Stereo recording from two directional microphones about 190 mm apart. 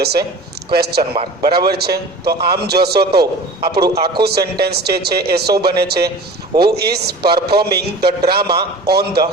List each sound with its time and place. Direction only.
0.0 s a man's voice: 55° right (ahead or behind)
1.1 s a man's voice: 30° right (ahead or behind)
1.5 s a man's voice: 55° right (ahead or behind)